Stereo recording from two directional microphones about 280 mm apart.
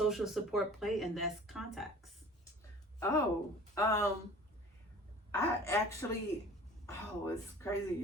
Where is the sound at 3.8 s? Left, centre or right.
Centre.